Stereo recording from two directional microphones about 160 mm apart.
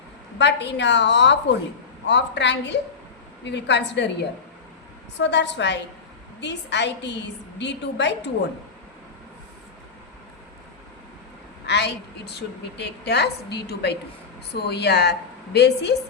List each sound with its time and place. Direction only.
0.3 s a woman's voice: 90° left
11.6 s a woman's voice: 90° left